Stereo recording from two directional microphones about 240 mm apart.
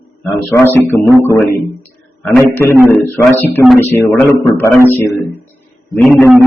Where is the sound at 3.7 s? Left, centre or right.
Centre.